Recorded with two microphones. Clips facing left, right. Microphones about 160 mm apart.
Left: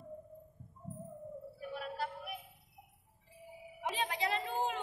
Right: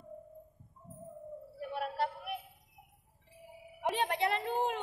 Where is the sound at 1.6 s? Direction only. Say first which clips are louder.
Right 6 dB; 70° right (ahead or behind).